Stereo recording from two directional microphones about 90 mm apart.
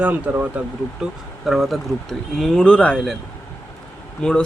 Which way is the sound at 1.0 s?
5° right (ahead or behind).